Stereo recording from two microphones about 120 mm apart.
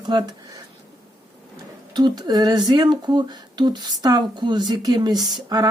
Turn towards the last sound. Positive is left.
turn(degrees=-35)  # may be behind; listen again after turning